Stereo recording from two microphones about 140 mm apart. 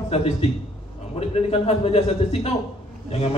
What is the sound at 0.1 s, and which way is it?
A man's voice, 45° left (ahead or behind).